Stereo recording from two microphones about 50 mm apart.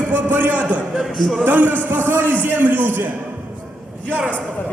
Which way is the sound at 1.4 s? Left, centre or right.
Right.